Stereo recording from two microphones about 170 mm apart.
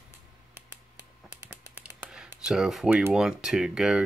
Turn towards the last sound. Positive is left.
turn(degrees=-5)  # may be behind; listen again after turning